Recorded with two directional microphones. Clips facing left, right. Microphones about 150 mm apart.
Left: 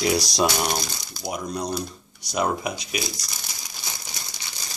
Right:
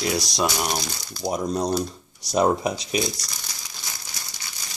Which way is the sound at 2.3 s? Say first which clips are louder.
Right 4 dB; 35° right (ahead or behind).